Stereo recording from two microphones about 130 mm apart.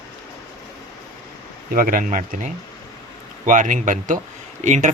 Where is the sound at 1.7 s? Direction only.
90° right.